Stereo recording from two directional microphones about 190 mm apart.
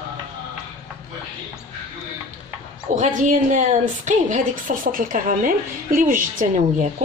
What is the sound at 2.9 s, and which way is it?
A woman's voice, 40° right (ahead or behind).